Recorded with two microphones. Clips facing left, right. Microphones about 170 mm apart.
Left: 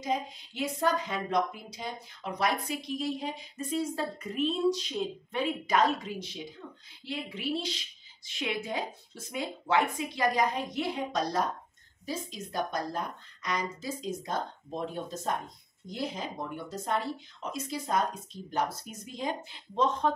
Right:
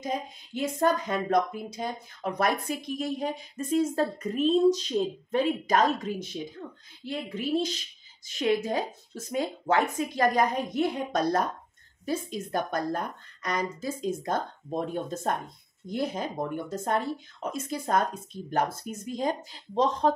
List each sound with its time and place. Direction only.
0.6 s speech: 50° right (ahead or behind)